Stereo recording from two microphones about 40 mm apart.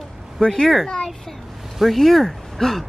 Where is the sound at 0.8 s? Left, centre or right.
Centre.